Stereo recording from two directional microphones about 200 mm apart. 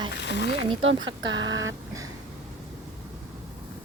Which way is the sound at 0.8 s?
75° right (ahead or behind).